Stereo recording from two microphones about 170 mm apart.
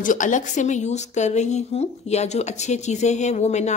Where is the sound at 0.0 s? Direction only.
50° left (ahead or behind).